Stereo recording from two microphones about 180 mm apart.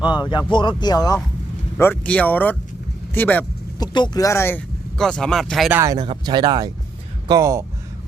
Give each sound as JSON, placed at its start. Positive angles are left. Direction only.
{"t": 0.1, "sound": "speech", "side_deg": 25}
{"t": 1.8, "sound": "speech", "side_deg": 10}
{"t": 3.8, "sound": "speech", "side_deg": 25}
{"t": 5.8, "sound": "speech", "side_deg": -20}